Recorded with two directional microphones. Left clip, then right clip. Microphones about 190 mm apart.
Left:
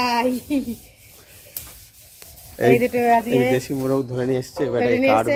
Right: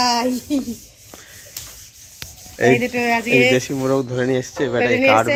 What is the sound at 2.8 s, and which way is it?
Speech, 55° left (ahead or behind).